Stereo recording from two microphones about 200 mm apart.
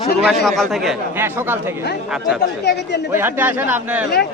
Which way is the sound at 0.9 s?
10° right (ahead or behind).